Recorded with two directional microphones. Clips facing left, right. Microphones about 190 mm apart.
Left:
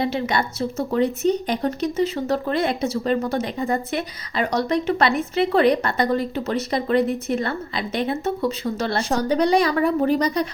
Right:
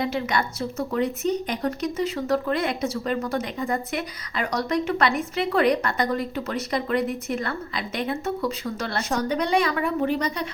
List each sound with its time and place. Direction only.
0.0 s speech: 30° left (ahead or behind)